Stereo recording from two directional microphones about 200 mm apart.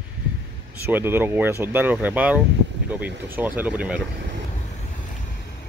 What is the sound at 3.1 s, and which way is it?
Speech, 60° right (ahead or behind).